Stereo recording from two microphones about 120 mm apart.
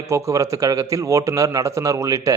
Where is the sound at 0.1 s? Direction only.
25° right (ahead or behind).